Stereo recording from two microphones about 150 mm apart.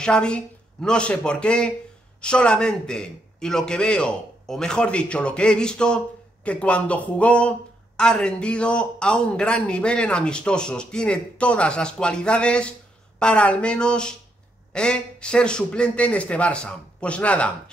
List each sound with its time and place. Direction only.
0.0 s a man's voice: 5° left (ahead or behind)